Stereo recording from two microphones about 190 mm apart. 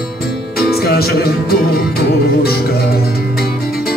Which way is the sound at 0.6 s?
55° left (ahead or behind).